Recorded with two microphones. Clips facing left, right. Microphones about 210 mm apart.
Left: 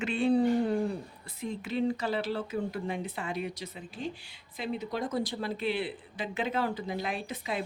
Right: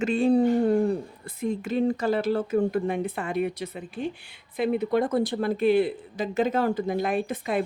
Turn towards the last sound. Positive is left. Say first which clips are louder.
# right 8 dB
turn(degrees=-50)  # may be behind; listen again after turning